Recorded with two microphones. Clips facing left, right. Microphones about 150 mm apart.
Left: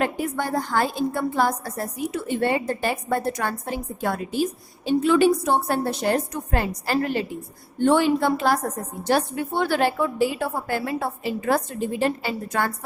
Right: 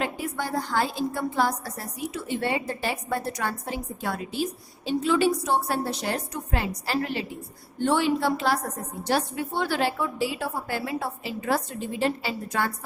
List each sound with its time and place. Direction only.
0.0 s a woman's voice: 50° left (ahead or behind)